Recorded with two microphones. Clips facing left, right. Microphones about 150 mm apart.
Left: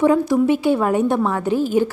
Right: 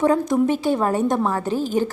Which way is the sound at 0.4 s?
10° left (ahead or behind).